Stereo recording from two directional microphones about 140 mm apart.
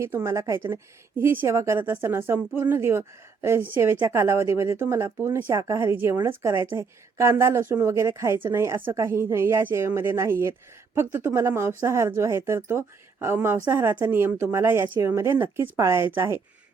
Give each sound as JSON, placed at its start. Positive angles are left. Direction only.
{"t": 0.0, "sound": "speech", "side_deg": -20}